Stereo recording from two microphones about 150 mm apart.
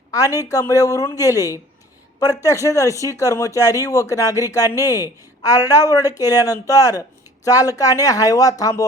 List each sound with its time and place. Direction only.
0.1 s a man's voice: 25° left (ahead or behind)